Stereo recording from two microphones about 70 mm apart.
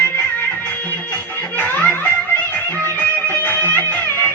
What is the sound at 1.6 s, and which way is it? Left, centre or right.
Music, left.